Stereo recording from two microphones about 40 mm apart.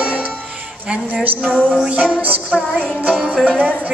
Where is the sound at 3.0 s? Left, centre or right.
Centre.